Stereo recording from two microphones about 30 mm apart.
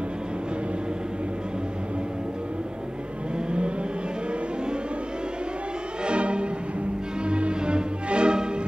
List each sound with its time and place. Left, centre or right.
6.0 s music: right